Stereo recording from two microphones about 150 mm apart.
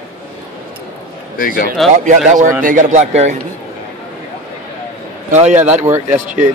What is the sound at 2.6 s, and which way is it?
Speech, 60° right (ahead or behind).